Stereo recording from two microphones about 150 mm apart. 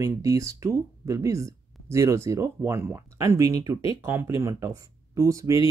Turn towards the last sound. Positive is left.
turn(degrees=-20)  # may be behind; listen again after turning